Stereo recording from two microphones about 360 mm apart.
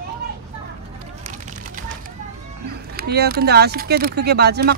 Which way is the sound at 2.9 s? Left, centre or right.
Right.